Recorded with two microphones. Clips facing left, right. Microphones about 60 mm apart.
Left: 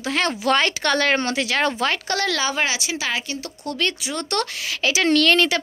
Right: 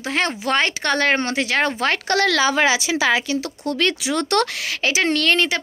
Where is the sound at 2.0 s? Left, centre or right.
Right.